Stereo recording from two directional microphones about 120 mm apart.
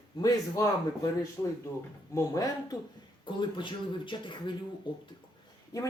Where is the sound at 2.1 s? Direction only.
30° left (ahead or behind).